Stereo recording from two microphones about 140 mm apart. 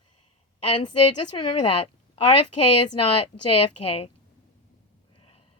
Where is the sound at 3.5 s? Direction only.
45° left (ahead or behind).